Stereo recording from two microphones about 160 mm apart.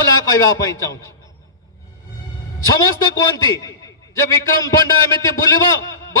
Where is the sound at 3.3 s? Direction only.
20° left (ahead or behind).